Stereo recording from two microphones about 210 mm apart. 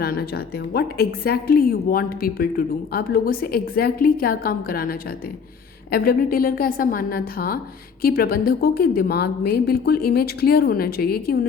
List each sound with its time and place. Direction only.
0.0 s a woman's voice: 45° left (ahead or behind)